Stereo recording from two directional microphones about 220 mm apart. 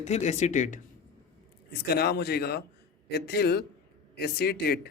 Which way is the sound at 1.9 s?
45° left (ahead or behind).